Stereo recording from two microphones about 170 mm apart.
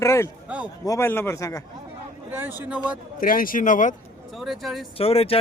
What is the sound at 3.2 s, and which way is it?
Speech, 55° left (ahead or behind).